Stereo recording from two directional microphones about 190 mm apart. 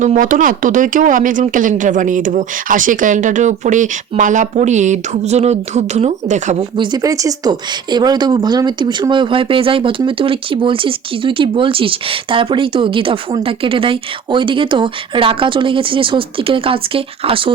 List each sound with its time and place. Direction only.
0.0 s speech: 40° right (ahead or behind)
6.7 s a woman's voice: 20° right (ahead or behind)